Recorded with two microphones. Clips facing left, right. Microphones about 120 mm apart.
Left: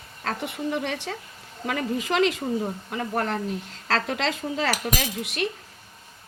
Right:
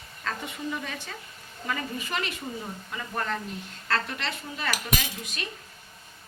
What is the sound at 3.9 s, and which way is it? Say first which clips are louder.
Cutlery: left 5 dB; 90° left.